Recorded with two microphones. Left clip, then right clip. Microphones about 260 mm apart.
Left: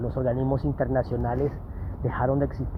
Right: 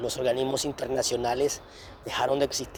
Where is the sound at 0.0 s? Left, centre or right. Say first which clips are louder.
Right 1 dB; right.